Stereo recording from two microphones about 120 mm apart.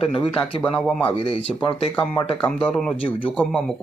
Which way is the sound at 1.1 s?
50° left (ahead or behind).